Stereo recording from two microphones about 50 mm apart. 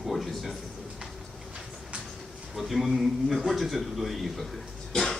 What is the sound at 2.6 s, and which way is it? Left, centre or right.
Speech, centre.